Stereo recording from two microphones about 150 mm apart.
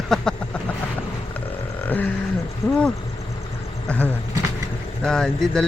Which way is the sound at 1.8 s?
10° left (ahead or behind).